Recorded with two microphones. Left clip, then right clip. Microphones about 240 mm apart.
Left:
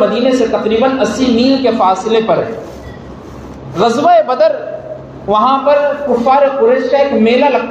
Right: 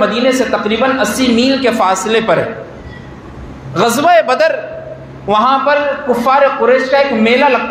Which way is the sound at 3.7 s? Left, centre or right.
Right.